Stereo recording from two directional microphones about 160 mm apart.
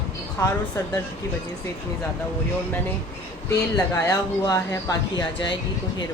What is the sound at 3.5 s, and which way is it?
Speech, 20° left (ahead or behind).